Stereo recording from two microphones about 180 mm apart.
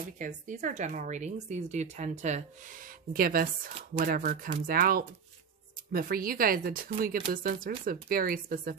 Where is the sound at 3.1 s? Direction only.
55° right (ahead or behind).